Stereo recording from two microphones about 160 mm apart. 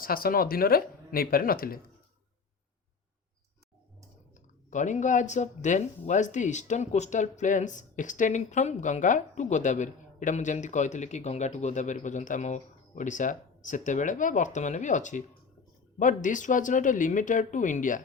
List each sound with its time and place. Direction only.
0.0 s speech: 65° left (ahead or behind)
4.7 s speech: 50° left (ahead or behind)